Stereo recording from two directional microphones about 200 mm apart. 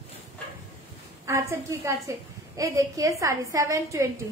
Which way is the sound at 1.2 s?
15° right (ahead or behind).